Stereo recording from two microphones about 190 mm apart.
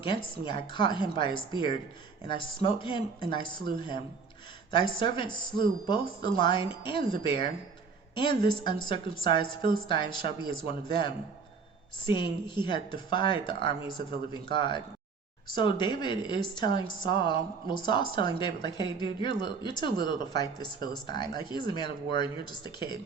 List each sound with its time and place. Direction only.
0.0 s a woman's voice: 25° left (ahead or behind)